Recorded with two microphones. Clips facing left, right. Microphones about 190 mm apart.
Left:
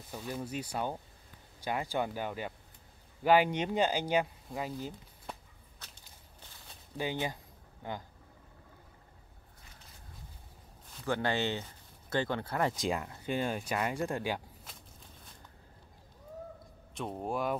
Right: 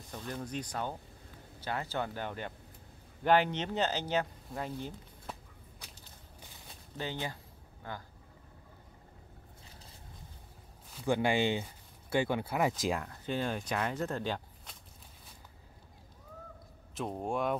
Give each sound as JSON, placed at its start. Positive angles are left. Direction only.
{"t": 0.1, "sound": "speech", "side_deg": 10}
{"t": 7.0, "sound": "speech", "side_deg": 15}
{"t": 11.1, "sound": "speech", "side_deg": -15}
{"t": 13.1, "sound": "speech", "side_deg": 10}
{"t": 16.9, "sound": "speech", "side_deg": 0}